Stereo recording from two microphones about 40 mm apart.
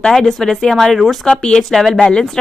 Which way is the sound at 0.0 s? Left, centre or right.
Centre.